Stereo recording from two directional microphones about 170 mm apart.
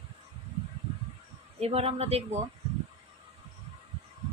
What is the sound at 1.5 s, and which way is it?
Speech, 35° right (ahead or behind).